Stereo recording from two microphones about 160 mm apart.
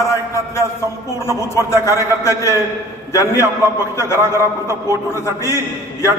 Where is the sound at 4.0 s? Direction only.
15° left (ahead or behind).